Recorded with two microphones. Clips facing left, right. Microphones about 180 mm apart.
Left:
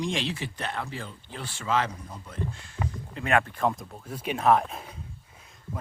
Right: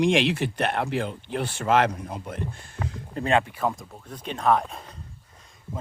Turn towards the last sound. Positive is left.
turn(degrees=5)  # may be behind; listen again after turning